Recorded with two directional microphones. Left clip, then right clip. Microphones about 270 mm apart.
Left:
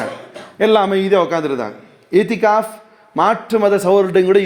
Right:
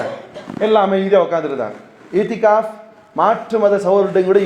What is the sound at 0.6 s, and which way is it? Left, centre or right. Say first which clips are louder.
A man's voice: left 1 dB; left.